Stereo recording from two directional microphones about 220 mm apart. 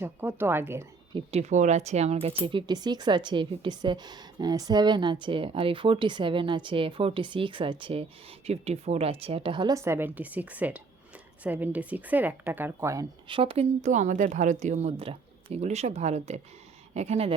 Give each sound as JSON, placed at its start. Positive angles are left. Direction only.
{"t": 0.0, "sound": "a woman's voice", "side_deg": -10}
{"t": 1.1, "sound": "a woman's voice", "side_deg": -30}